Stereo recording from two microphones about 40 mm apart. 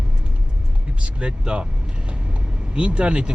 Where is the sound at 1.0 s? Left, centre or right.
Right.